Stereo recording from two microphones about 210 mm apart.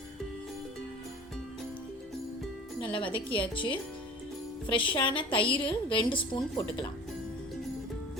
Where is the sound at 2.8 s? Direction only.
25° left (ahead or behind).